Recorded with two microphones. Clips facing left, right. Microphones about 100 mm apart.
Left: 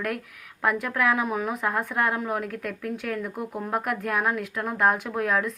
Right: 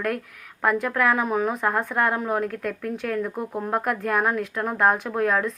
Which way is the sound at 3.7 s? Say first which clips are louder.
Right 3 dB; 5° left (ahead or behind).